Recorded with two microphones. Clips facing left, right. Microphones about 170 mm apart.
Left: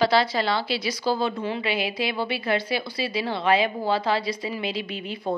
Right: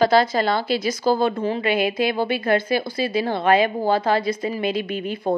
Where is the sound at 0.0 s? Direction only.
45° right (ahead or behind).